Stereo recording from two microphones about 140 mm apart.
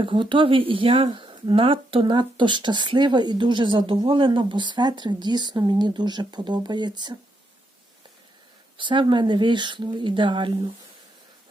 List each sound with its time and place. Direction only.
0.0 s speech: 35° right (ahead or behind)
8.8 s speech: 35° right (ahead or behind)